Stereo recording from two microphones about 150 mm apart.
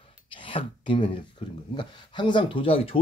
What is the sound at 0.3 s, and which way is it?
Speech, 35° left (ahead or behind).